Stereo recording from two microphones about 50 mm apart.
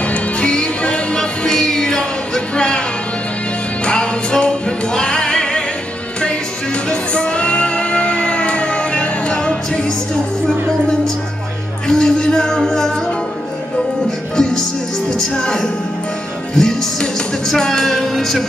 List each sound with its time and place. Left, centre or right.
0.0 s music: left
3.8 s music: centre
11.9 s music: centre
14.3 s music: centre